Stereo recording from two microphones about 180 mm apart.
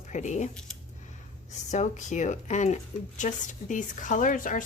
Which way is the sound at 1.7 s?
40° left (ahead or behind).